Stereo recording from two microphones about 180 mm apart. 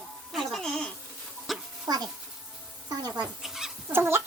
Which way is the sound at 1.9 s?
20° right (ahead or behind).